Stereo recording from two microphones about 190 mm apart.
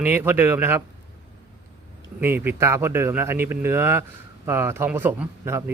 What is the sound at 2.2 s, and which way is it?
Speech, 10° right (ahead or behind).